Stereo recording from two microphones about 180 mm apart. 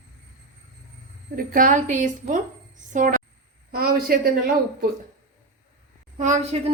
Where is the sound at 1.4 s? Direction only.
50° right (ahead or behind).